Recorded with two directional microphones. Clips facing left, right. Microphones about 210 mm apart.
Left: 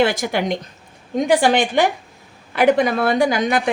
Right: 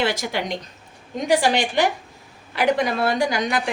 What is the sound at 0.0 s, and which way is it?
Speech, 50° left (ahead or behind).